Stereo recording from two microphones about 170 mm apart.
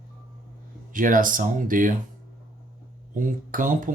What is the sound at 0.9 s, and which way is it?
Speech, 55° right (ahead or behind).